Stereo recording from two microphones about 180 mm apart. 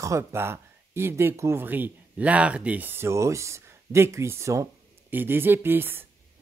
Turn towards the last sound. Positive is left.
turn(degrees=-10)  # may be behind; listen again after turning